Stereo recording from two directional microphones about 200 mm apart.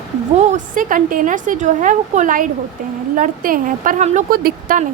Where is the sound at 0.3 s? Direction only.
35° right (ahead or behind).